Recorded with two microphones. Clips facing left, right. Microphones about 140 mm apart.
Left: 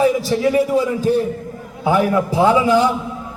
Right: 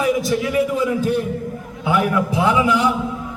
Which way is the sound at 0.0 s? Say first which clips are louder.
Left 3 dB; 30° left (ahead or behind).